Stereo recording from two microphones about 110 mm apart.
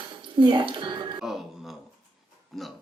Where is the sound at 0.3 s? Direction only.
45° right (ahead or behind).